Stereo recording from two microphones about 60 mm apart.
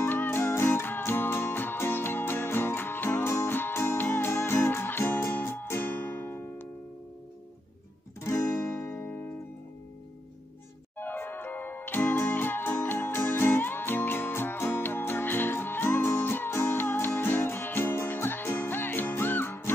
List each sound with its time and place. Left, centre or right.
0.1 s music: left
8.2 s guitar: left
8.8 s music: left
11.0 s music: left